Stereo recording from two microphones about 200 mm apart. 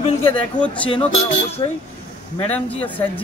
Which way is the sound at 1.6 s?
20° left (ahead or behind).